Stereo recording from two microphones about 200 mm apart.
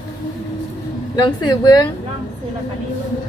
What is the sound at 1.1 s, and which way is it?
Speech, 20° left (ahead or behind).